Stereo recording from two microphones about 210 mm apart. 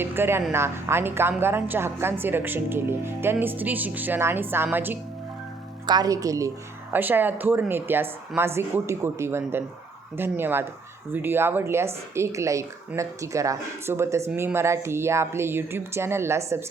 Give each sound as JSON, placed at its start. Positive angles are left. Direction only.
{"t": 0.0, "sound": "a woman's voice", "side_deg": -10}